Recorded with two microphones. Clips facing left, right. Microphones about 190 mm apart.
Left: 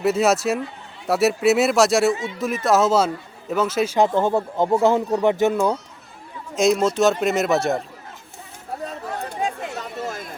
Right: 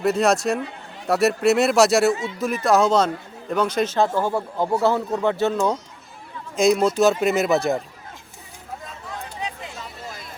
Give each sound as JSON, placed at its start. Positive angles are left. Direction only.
{"t": 0.0, "sound": "speech", "side_deg": 5}
{"t": 6.6, "sound": "speech", "side_deg": 0}
{"t": 8.8, "sound": "chatter", "side_deg": 40}
{"t": 9.2, "sound": "a sound", "side_deg": 45}